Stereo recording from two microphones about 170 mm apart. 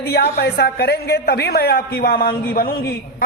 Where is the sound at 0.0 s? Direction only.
70° left (ahead or behind).